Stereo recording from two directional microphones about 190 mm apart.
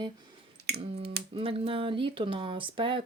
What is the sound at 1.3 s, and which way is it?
Speech, 30° right (ahead or behind).